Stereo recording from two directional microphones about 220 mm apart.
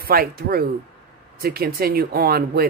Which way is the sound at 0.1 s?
45° right (ahead or behind).